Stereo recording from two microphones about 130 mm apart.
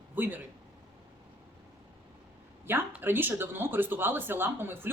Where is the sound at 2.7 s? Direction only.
15° right (ahead or behind).